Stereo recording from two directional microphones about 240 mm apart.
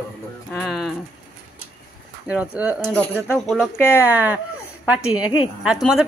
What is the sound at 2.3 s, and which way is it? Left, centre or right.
A woman's voice, centre.